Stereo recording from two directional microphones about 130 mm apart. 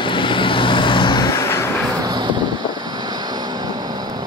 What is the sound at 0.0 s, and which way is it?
Vehicle, 40° left (ahead or behind).